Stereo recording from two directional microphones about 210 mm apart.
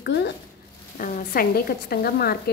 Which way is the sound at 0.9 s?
40° left (ahead or behind).